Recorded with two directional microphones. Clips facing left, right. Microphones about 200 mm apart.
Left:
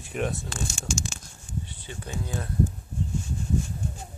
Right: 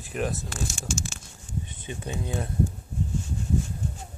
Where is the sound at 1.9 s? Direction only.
15° right (ahead or behind).